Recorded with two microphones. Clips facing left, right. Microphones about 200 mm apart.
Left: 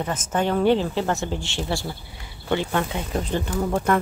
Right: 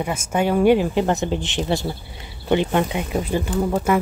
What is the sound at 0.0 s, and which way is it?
Speech, 10° right (ahead or behind).